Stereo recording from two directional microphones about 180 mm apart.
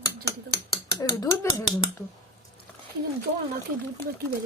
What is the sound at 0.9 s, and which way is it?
Speech, 20° left (ahead or behind).